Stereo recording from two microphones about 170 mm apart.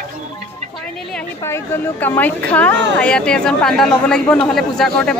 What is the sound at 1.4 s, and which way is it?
A woman's voice, 15° left (ahead or behind).